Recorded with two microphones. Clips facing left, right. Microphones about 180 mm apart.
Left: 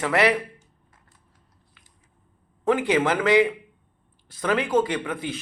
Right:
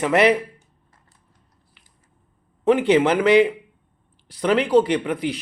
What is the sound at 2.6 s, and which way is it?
A man's voice, 20° right (ahead or behind).